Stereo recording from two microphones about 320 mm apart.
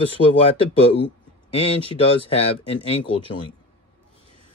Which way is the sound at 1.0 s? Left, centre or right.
Centre.